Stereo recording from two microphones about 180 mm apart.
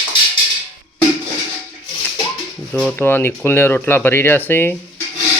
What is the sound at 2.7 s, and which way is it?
Speech, 5° left (ahead or behind).